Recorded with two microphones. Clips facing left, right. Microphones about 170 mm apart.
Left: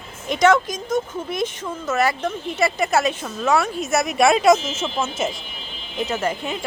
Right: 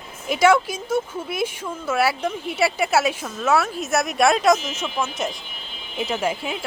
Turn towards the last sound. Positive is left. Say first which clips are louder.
# even
turn(degrees=-5)  # may be behind; listen again after turning